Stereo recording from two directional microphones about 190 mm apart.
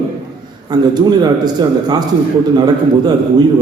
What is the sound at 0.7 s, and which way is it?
Speech, 20° right (ahead or behind).